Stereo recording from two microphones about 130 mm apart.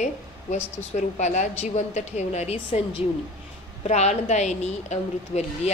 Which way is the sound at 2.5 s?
40° left (ahead or behind).